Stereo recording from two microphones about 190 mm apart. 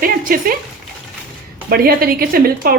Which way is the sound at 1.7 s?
50° right (ahead or behind).